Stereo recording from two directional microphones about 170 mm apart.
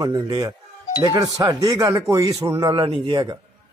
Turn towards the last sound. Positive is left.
turn(degrees=-25)  # may be behind; listen again after turning